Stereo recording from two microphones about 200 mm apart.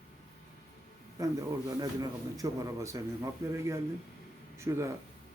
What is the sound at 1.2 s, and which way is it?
Speech, 15° right (ahead or behind).